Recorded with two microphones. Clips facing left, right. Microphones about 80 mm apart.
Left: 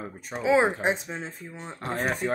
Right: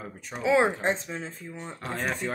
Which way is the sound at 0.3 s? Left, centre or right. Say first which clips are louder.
Left 1 dB; centre.